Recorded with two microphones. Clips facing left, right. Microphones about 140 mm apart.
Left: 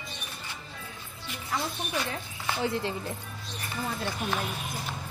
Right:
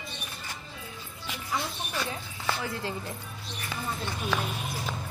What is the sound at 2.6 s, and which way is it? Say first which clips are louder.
Speech: left 4 dB; 25° left (ahead or behind).